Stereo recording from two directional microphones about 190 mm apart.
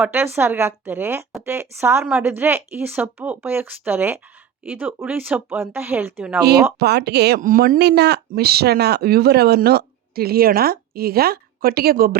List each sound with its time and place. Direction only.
0.0 s a woman's voice: 10° right (ahead or behind)
6.7 s speech: 60° right (ahead or behind)